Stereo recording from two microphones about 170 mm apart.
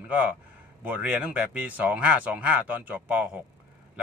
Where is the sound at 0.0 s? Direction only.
10° right (ahead or behind).